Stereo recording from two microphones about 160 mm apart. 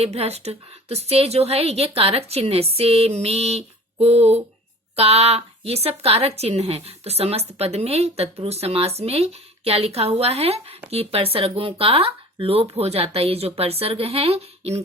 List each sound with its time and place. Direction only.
0.0 s a woman's voice: 40° right (ahead or behind)